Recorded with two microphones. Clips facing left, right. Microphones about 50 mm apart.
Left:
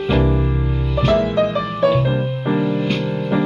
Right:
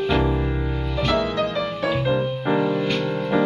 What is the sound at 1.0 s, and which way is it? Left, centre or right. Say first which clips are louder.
Music: left 6 dB; left.